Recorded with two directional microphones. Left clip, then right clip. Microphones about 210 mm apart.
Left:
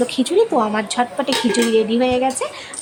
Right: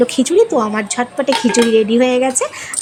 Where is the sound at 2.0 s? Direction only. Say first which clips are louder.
Right 4 dB; 15° right (ahead or behind).